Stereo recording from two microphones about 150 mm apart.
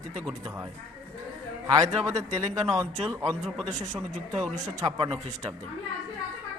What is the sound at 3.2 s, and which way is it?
Speech, centre (ahead or behind).